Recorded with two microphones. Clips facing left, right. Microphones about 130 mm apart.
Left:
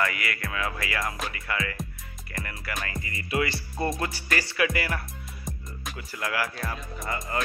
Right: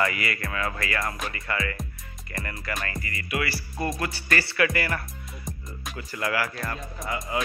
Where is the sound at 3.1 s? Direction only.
25° left (ahead or behind).